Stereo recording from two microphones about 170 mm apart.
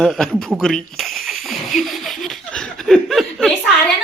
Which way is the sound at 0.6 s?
5° left (ahead or behind).